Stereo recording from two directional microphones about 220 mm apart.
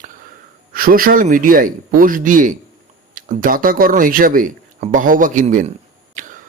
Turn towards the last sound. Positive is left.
turn(degrees=-35)  # may be behind; listen again after turning